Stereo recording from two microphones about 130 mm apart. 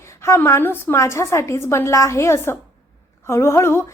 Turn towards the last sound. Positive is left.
turn(degrees=20)  # may be behind; listen again after turning